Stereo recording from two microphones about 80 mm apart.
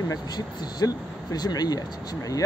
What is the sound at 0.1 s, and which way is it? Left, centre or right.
Speech, left.